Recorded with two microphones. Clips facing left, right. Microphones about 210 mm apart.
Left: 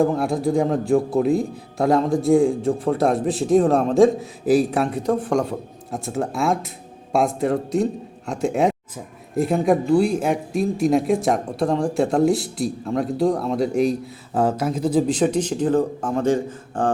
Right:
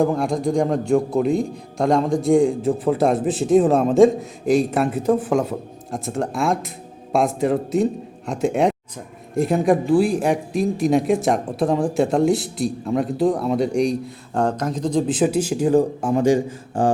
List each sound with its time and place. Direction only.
0.0 s speech: centre (ahead or behind)